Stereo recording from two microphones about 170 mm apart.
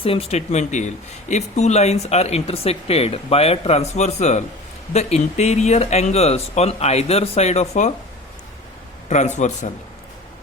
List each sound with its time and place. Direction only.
0.0 s speech: 35° left (ahead or behind)
9.0 s a man's voice: 45° left (ahead or behind)